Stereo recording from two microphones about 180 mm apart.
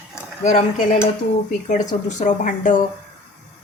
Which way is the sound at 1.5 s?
40° left (ahead or behind).